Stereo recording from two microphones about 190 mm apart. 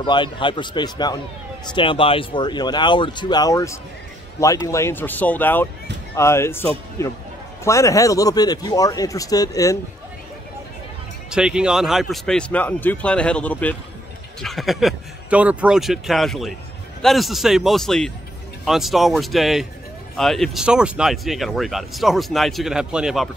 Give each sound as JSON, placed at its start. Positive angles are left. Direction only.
{"t": 0.0, "sound": "speech", "side_deg": 25}
{"t": 11.2, "sound": "speech", "side_deg": -5}